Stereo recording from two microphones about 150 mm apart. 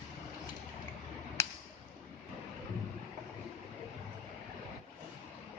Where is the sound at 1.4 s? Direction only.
20° left (ahead or behind).